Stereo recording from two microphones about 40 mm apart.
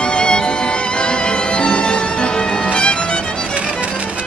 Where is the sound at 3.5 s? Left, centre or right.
Right.